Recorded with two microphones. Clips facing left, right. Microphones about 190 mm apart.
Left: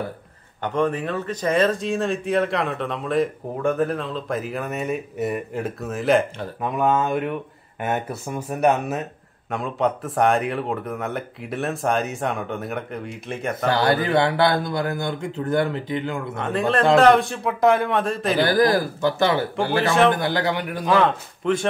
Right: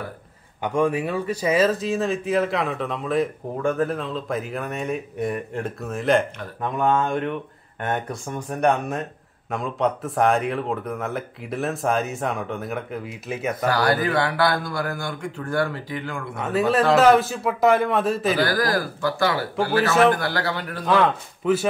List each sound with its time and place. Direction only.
0.6 s speech: 10° right (ahead or behind)
13.7 s a man's voice: 25° left (ahead or behind)
16.3 s speech: 5° right (ahead or behind)
18.4 s a man's voice: 20° left (ahead or behind)
19.8 s speech: 5° right (ahead or behind)
20.1 s a man's voice: 20° left (ahead or behind)
20.8 s speech: centre (ahead or behind)